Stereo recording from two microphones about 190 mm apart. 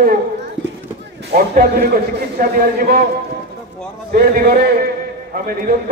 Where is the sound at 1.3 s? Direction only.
55° right (ahead or behind).